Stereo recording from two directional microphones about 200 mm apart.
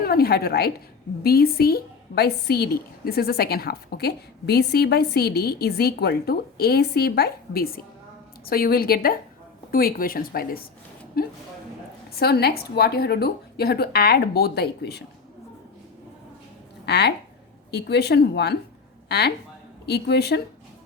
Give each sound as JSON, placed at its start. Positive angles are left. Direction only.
{"t": 0.0, "sound": "a woman's voice", "side_deg": 50}
{"t": 16.8, "sound": "a woman's voice", "side_deg": 55}